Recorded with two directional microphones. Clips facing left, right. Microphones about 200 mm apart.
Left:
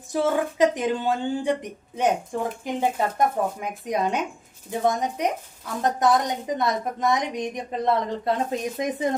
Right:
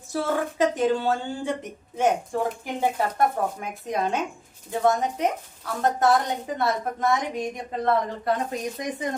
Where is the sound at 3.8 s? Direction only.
15° left (ahead or behind).